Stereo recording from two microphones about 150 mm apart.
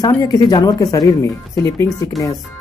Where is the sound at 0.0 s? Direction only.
25° left (ahead or behind).